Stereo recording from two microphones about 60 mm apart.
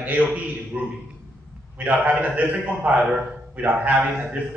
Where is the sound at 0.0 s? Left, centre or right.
Right.